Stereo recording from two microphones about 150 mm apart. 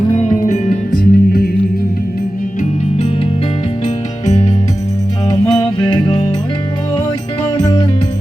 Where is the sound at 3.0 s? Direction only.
40° left (ahead or behind).